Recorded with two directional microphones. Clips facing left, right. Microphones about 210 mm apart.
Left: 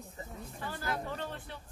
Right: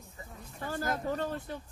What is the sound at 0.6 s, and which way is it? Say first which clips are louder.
Speech: right 4 dB; 45° right (ahead or behind).